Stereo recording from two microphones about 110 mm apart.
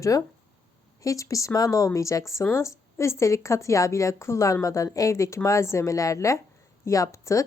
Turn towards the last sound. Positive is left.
turn(degrees=30)  # may be behind; listen again after turning